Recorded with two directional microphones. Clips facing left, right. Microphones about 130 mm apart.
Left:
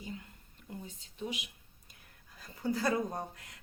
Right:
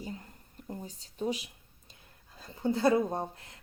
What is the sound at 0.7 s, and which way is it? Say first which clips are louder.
Speech: right 4 dB; 40° right (ahead or behind).